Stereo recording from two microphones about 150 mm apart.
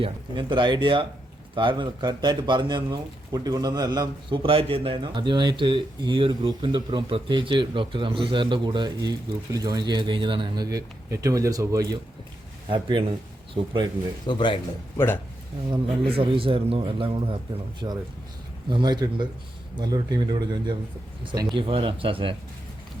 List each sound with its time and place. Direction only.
0.0 s speech: 30° right (ahead or behind)
14.3 s a man's voice: 35° left (ahead or behind)
14.9 s speech: 15° left (ahead or behind)
15.7 s speech: 35° right (ahead or behind)
17.8 s speech: 25° right (ahead or behind)